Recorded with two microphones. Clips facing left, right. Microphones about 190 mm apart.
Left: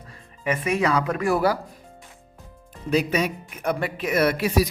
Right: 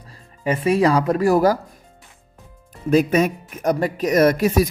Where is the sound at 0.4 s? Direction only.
30° right (ahead or behind).